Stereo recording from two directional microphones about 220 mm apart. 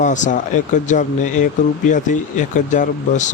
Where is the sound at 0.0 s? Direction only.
35° left (ahead or behind).